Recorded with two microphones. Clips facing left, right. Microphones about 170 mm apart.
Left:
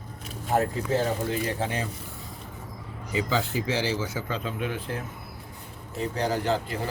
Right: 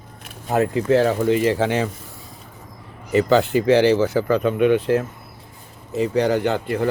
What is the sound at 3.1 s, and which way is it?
Speech, 70° right (ahead or behind).